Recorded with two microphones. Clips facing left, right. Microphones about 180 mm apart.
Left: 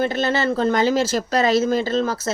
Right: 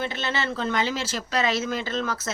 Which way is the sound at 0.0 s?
40° left (ahead or behind).